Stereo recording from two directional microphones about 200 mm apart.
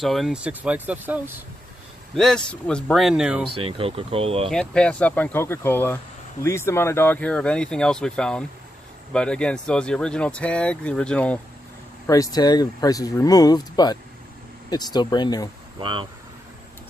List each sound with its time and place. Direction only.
0.0 s speech: centre (ahead or behind)
2.1 s speech: 5° left (ahead or behind)
3.5 s speech: 30° right (ahead or behind)
4.5 s speech: 5° left (ahead or behind)
12.1 s speech: 20° left (ahead or behind)
15.8 s speech: 25° right (ahead or behind)